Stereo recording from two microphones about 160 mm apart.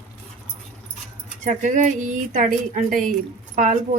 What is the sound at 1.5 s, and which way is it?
A woman's voice, 50° right (ahead or behind).